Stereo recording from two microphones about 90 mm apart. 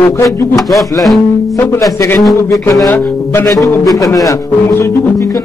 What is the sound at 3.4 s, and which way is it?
Speech, 40° left (ahead or behind).